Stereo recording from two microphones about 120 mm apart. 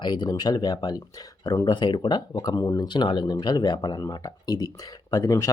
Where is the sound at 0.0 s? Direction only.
40° left (ahead or behind).